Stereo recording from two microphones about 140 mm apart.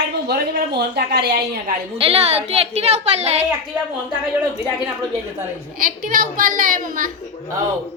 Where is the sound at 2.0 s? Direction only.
45° right (ahead or behind).